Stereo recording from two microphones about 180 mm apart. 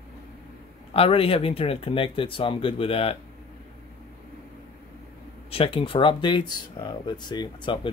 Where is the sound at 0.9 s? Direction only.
30° left (ahead or behind).